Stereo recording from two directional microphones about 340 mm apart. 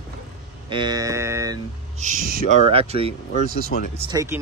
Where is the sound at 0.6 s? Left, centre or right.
Centre.